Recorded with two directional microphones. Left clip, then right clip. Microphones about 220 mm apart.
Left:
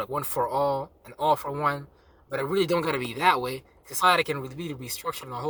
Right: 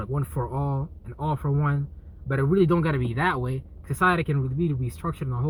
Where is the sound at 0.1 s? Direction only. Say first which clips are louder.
Left 5 dB; 15° left (ahead or behind).